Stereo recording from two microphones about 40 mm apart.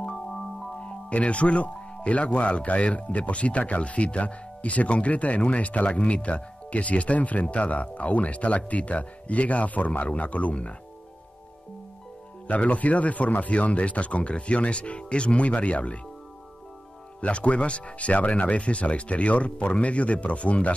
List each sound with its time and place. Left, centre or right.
1.1 s speech: left
12.4 s speech: left
17.2 s speech: left